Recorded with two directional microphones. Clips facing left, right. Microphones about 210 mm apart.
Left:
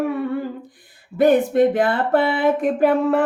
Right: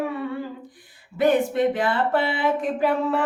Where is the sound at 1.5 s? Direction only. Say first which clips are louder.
Left 5 dB; 50° left (ahead or behind).